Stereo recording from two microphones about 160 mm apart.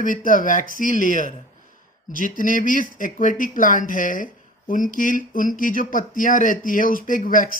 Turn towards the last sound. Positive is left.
turn(degrees=55)  # may be behind; listen again after turning